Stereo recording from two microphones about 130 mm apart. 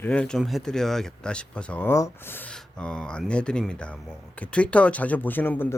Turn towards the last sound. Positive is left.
turn(degrees=15)  # may be behind; listen again after turning